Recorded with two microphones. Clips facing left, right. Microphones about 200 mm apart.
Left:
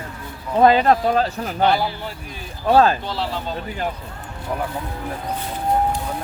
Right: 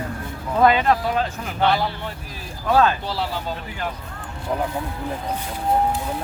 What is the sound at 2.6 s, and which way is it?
Speech, 30° left (ahead or behind).